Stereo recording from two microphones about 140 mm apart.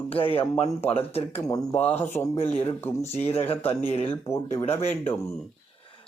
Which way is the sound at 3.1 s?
50° left (ahead or behind).